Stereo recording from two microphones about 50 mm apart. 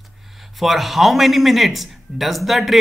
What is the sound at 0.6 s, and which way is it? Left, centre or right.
A man's voice, centre.